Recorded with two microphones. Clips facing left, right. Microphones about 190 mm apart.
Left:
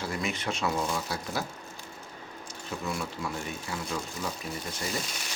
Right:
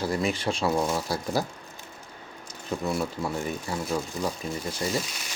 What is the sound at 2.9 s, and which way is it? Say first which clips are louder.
Speech: right 5 dB; 35° right (ahead or behind).